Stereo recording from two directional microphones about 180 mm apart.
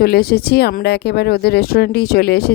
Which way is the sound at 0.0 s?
60° left (ahead or behind).